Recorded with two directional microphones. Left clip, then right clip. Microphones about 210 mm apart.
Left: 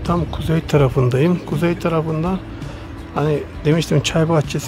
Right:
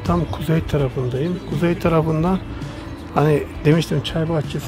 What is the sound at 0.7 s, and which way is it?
Speech, 20° left (ahead or behind).